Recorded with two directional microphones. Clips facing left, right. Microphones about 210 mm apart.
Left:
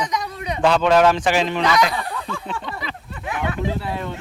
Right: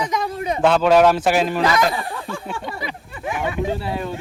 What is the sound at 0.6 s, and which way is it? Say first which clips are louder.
A man's voice: right 1 dB; 5° right (ahead or behind).